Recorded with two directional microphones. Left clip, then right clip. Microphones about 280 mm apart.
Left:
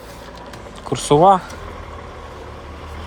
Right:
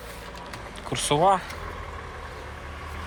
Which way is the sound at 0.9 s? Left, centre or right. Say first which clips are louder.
Left 9 dB; centre.